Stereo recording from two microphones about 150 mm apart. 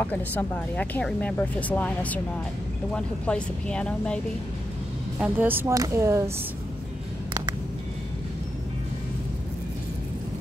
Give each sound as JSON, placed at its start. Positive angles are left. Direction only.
{"t": 0.0, "sound": "speech", "side_deg": 10}
{"t": 5.2, "sound": "speech", "side_deg": -10}